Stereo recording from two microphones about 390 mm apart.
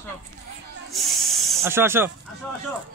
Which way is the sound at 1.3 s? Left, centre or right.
Centre.